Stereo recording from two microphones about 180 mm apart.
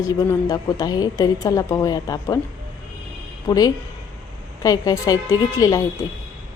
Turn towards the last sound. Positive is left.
turn(degrees=20)  # may be behind; listen again after turning